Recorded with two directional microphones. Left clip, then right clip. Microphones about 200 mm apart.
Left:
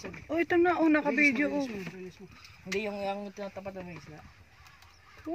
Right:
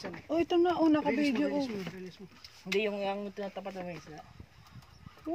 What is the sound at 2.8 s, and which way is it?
Speech, 60° left (ahead or behind).